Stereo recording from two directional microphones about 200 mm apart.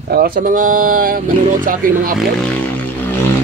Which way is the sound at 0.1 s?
50° right (ahead or behind).